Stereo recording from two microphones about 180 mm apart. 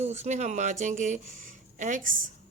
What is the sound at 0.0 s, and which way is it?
A woman's voice, 40° right (ahead or behind).